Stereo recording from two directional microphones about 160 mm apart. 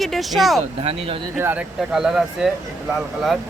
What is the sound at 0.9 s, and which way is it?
Speech, 35° right (ahead or behind).